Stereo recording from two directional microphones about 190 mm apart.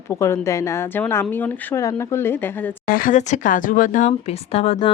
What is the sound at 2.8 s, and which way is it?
Speech, 45° left (ahead or behind).